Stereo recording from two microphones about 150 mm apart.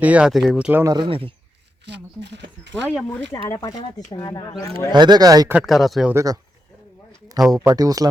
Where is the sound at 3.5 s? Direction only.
25° left (ahead or behind).